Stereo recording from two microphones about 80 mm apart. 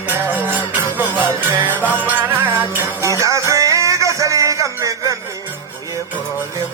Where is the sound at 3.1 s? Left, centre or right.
Right.